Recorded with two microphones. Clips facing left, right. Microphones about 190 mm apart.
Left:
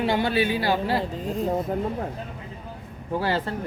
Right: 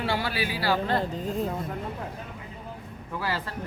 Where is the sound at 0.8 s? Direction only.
5° left (ahead or behind).